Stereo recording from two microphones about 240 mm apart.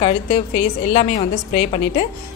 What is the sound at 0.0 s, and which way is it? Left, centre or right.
A woman's voice, left.